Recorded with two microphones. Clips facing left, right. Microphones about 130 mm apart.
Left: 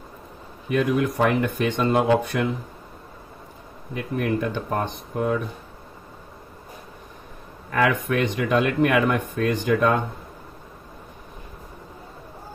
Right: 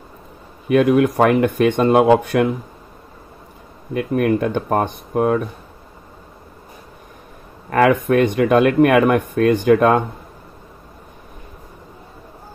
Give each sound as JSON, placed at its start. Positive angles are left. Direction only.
{"t": 0.7, "sound": "speech", "side_deg": -65}
{"t": 3.9, "sound": "speech", "side_deg": -60}
{"t": 7.7, "sound": "speech", "side_deg": -50}